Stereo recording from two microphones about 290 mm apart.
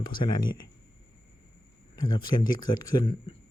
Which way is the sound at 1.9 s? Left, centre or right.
Centre.